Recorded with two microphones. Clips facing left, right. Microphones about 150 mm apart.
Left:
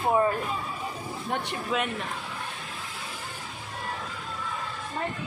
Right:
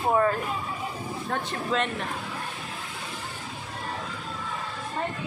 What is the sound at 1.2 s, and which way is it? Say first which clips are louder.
Speech: right 1 dB; 10° left (ahead or behind).